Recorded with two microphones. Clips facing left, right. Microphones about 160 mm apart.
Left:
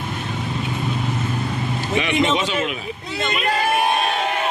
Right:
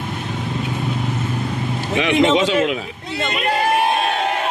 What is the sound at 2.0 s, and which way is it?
Speech, 90° right.